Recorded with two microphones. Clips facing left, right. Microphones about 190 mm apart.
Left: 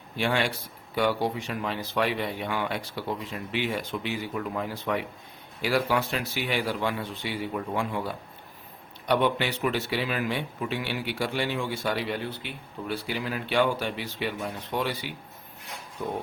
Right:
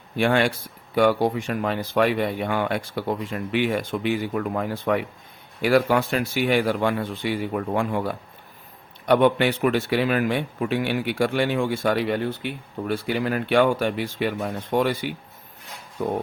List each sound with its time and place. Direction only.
0.2 s speech: 55° right (ahead or behind)